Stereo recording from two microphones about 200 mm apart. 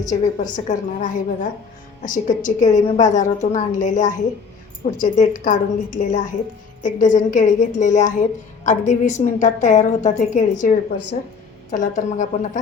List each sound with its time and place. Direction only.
0.1 s a woman's voice: 40° left (ahead or behind)